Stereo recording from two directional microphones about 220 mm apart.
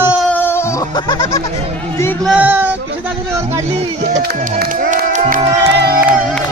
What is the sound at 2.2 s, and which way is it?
Speech, 5° right (ahead or behind).